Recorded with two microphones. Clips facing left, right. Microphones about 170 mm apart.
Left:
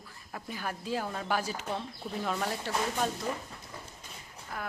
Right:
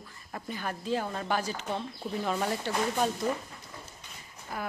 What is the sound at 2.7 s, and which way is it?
Speech, centre (ahead or behind).